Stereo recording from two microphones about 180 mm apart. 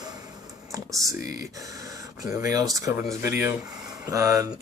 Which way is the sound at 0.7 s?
20° right (ahead or behind).